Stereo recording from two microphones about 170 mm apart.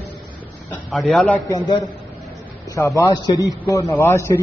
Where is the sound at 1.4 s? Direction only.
30° left (ahead or behind).